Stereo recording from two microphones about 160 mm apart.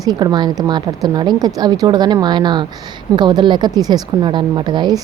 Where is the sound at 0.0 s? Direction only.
25° right (ahead or behind).